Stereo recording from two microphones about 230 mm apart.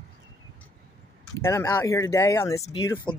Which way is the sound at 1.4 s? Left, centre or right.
Centre.